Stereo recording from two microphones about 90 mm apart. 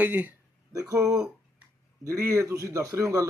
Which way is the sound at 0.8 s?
35° right (ahead or behind).